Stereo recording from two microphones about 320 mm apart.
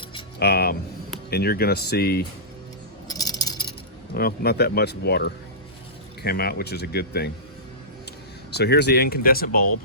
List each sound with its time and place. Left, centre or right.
0.3 s speech: left
3.1 s a sound: centre
4.1 s speech: left
8.5 s speech: left